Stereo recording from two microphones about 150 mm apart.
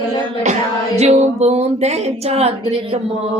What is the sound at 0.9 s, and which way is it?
Speech, 45° right (ahead or behind).